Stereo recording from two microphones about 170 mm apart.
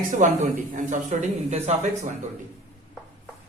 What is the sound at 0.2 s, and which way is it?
A man's voice, 50° right (ahead or behind).